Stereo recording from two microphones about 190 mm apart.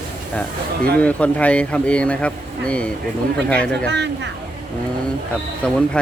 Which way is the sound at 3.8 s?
65° right (ahead or behind).